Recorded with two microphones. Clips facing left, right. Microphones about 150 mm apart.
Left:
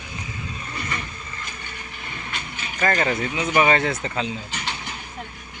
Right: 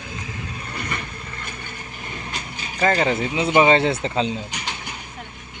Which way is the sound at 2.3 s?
35° right (ahead or behind).